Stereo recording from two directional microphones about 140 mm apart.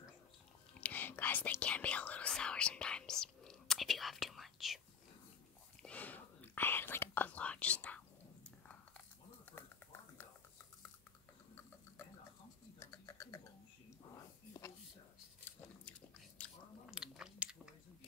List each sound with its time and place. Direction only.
0.7 s speech: 15° left (ahead or behind)
5.8 s whispering: 10° left (ahead or behind)
8.5 s biting: 10° left (ahead or behind)
12.7 s a sound: 25° left (ahead or behind)
14.1 s whispering: 25° left (ahead or behind)
16.4 s chewing: 10° left (ahead or behind)
16.8 s chewing: 5° right (ahead or behind)